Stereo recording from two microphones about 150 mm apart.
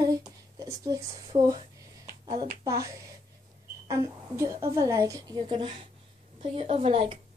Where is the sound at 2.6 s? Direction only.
20° right (ahead or behind).